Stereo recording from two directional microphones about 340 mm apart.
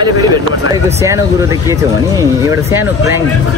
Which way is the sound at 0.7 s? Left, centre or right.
Centre.